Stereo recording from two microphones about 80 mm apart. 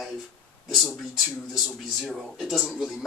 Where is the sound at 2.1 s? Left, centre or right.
Centre.